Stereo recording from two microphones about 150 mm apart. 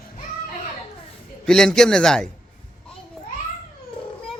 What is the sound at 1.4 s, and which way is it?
Speech, 5° left (ahead or behind).